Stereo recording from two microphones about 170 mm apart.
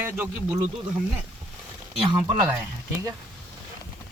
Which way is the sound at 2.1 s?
25° right (ahead or behind).